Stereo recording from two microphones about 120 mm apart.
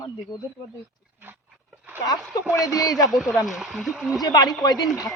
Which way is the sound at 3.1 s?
Centre (ahead or behind).